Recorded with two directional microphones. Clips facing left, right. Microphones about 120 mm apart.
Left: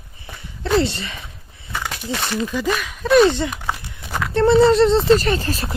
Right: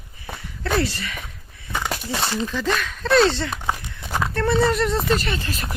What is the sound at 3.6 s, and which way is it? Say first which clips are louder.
Walk: even; 15° right (ahead or behind).